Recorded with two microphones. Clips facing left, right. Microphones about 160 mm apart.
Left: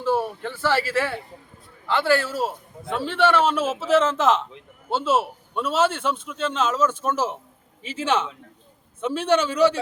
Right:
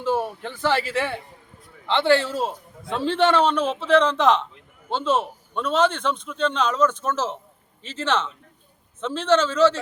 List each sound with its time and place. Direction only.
0.0 s a sound: 15° right (ahead or behind)
0.6 s a man's voice: 15° right (ahead or behind)
3.4 s a man's voice: 5° left (ahead or behind)